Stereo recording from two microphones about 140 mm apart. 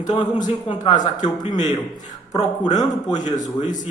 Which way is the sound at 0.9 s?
60° left (ahead or behind).